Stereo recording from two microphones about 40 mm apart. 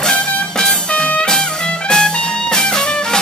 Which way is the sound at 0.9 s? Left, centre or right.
Left.